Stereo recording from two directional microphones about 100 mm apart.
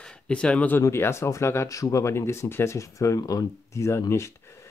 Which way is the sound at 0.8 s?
25° left (ahead or behind).